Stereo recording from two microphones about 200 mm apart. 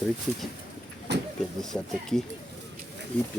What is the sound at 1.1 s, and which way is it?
Vehicle, 60° right (ahead or behind).